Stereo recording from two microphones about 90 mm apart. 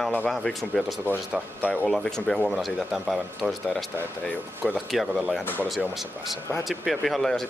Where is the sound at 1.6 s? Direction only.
20° left (ahead or behind).